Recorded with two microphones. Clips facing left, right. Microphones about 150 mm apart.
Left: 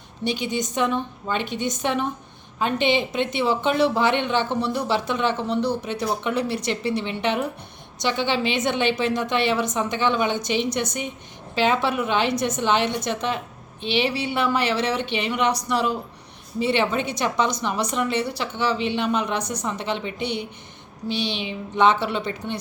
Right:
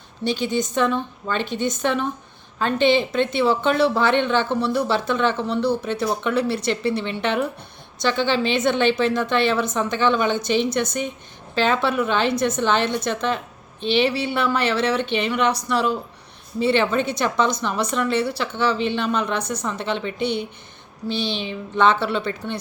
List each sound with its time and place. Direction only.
0.3 s speech: 15° left (ahead or behind)